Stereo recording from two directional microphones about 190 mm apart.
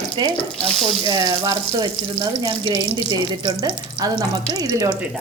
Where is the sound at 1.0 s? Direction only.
20° right (ahead or behind).